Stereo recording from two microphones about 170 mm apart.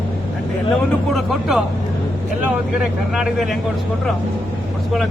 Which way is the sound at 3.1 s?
Centre (ahead or behind).